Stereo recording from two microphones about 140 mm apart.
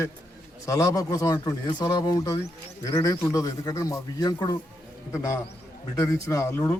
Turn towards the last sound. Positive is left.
turn(degrees=15)  # may be behind; listen again after turning